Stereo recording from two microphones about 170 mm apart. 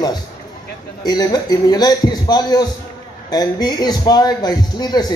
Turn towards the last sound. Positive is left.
turn(degrees=20)  # may be behind; listen again after turning